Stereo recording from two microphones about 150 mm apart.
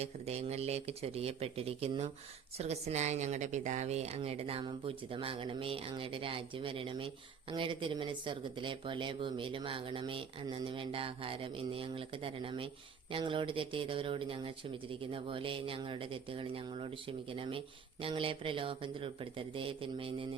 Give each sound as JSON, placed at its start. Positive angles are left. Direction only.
{"t": 0.0, "sound": "speech", "side_deg": -45}